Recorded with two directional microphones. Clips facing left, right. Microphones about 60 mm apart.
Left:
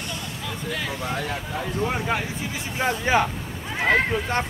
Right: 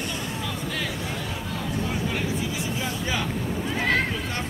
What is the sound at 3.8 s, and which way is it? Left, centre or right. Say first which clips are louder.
Speech: left 5 dB; left.